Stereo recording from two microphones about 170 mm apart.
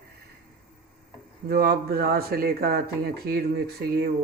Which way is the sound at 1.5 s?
65° right (ahead or behind).